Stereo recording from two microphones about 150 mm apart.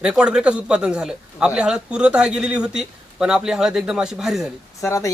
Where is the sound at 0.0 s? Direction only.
5° right (ahead or behind).